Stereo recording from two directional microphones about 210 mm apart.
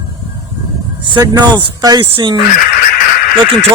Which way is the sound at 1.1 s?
20° right (ahead or behind).